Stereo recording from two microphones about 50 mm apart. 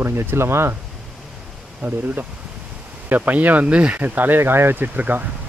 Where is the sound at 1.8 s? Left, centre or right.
Right.